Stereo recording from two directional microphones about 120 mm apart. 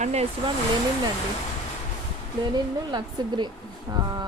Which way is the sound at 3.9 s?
30° right (ahead or behind).